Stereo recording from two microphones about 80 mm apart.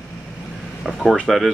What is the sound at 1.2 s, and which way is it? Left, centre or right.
Speech, centre.